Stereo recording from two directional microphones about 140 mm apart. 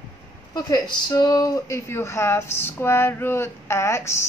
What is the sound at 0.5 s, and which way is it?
Speech, 30° left (ahead or behind).